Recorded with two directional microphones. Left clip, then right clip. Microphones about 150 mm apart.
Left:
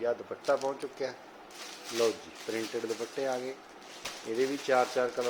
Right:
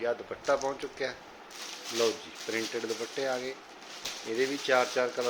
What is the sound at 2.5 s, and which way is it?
Speech, centre (ahead or behind).